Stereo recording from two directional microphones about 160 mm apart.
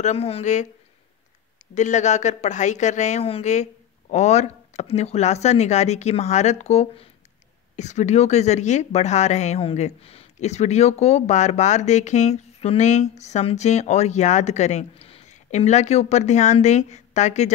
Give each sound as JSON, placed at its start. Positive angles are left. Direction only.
{"t": 0.0, "sound": "speech", "side_deg": 40}
{"t": 1.8, "sound": "speech", "side_deg": 50}